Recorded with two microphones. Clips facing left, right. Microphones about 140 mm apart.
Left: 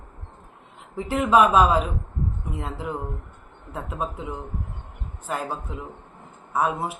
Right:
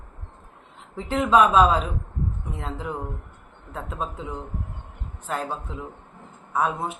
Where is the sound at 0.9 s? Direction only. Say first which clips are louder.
Even; 5° left (ahead or behind).